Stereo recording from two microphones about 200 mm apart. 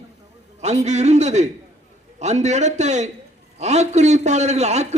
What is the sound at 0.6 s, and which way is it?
Speech, 35° right (ahead or behind).